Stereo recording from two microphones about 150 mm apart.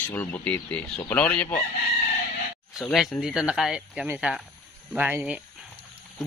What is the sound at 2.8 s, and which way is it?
Speech, centre (ahead or behind).